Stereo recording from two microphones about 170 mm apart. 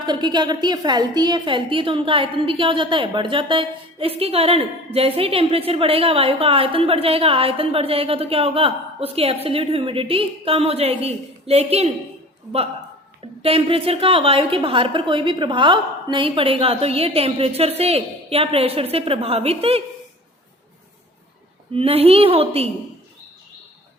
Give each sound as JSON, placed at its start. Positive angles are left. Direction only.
{"t": 0.0, "sound": "a woman's voice", "side_deg": -25}
{"t": 13.4, "sound": "a woman's voice", "side_deg": -35}
{"t": 21.8, "sound": "a woman's voice", "side_deg": -35}